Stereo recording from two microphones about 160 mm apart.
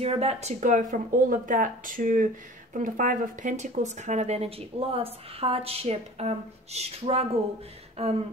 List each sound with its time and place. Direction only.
0.0 s speech: 40° right (ahead or behind)